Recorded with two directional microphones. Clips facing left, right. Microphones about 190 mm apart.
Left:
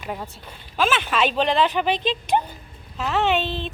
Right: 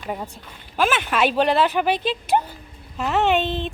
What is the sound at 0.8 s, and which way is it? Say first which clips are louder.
Speech: right 1 dB; 15° right (ahead or behind).